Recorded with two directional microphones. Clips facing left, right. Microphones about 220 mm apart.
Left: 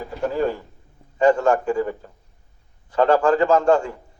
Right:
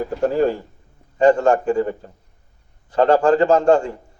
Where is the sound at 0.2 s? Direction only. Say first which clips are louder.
Right 4 dB; 35° right (ahead or behind).